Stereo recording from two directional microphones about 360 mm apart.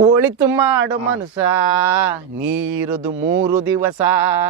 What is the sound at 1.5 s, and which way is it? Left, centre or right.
Speech, left.